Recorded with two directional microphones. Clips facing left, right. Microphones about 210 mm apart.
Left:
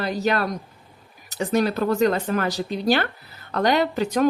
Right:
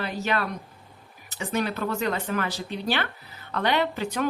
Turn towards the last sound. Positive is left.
turn(degrees=40)  # may be behind; listen again after turning